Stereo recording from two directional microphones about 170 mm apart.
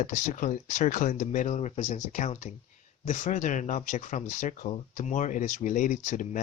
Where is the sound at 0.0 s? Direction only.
50° left (ahead or behind).